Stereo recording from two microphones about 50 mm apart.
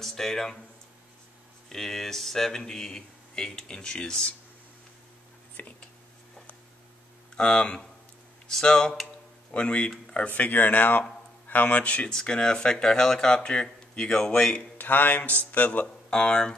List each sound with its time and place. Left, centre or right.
0.0 s speech: centre
1.7 s speech: centre
5.6 s a man's voice: left
7.3 s speech: centre
9.5 s speech: left
10.3 s a man's voice: left
12.1 s speech: centre
14.8 s a man's voice: left
16.1 s speech: centre